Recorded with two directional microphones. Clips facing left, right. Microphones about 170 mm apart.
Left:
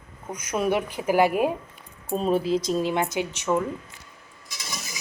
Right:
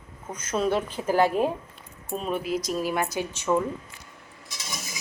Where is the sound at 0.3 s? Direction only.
15° left (ahead or behind).